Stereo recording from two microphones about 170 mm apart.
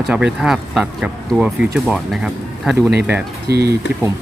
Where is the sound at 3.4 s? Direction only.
70° right (ahead or behind).